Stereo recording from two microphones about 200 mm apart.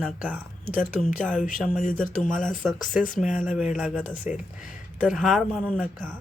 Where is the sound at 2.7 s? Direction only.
40° left (ahead or behind).